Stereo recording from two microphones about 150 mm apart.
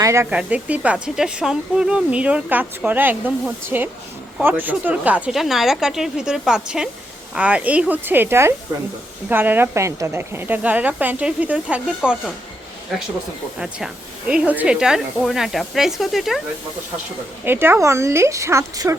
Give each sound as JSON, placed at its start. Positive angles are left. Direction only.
{"t": 0.0, "sound": "speech", "side_deg": -20}
{"t": 0.3, "sound": "speech", "side_deg": -10}
{"t": 13.6, "sound": "speech", "side_deg": -5}
{"t": 17.4, "sound": "speech", "side_deg": -15}